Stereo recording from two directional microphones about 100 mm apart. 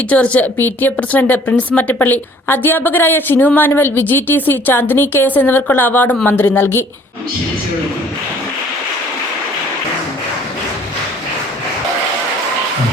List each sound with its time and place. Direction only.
0.1 s a woman's voice: 15° left (ahead or behind)